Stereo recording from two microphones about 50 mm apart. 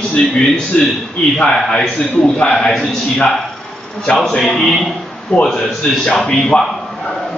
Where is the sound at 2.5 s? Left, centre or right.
Centre.